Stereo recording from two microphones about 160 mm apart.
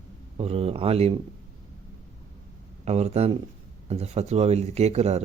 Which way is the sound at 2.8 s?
40° right (ahead or behind).